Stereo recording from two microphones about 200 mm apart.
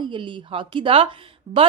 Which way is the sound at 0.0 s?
25° right (ahead or behind).